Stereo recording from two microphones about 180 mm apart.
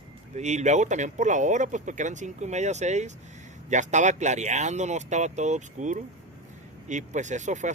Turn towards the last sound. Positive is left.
turn(degrees=-40)  # may be behind; listen again after turning